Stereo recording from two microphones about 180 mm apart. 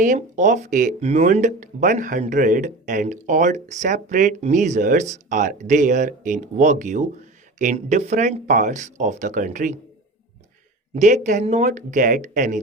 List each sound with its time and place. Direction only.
0.0 s speech: 45° right (ahead or behind)
10.9 s speech: 40° right (ahead or behind)